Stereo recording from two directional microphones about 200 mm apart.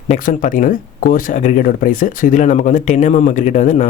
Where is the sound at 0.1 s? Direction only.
40° left (ahead or behind).